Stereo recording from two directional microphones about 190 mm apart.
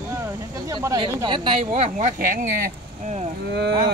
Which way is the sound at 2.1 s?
45° right (ahead or behind).